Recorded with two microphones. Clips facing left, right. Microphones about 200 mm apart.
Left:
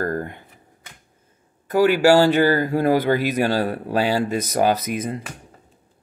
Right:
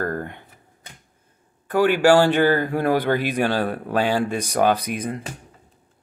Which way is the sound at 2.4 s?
10° left (ahead or behind).